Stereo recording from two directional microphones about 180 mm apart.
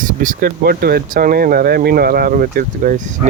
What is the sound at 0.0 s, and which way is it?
Speech, 50° right (ahead or behind).